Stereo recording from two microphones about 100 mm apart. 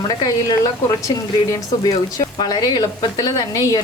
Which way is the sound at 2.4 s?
40° left (ahead or behind).